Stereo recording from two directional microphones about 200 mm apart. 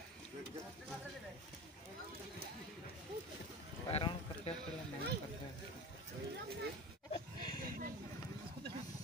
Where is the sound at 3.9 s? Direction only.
30° left (ahead or behind).